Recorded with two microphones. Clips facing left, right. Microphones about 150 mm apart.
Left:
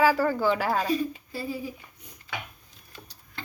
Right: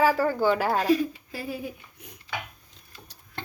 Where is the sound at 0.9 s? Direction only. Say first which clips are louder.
Right 1 dB; 85° right.